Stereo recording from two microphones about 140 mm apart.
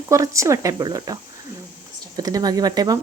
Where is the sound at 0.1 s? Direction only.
20° right (ahead or behind).